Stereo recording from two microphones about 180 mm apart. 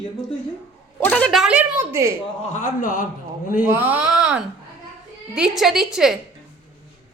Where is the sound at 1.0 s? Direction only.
10° left (ahead or behind); by 2.1 s 15° right (ahead or behind).